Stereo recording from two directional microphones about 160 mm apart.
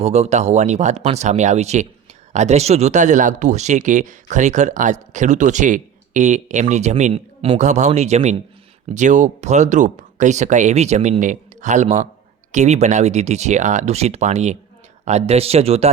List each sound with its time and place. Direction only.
0.0 s speech: 45° right (ahead or behind)